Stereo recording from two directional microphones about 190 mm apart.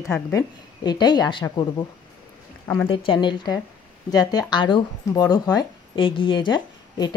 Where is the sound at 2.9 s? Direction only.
25° left (ahead or behind).